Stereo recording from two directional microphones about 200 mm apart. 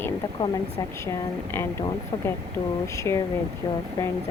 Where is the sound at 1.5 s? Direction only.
15° left (ahead or behind).